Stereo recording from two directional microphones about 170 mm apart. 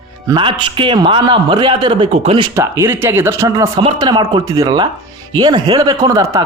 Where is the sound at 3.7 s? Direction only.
30° right (ahead or behind).